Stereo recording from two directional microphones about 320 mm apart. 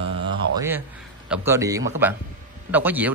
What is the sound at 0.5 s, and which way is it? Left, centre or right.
Speech, centre.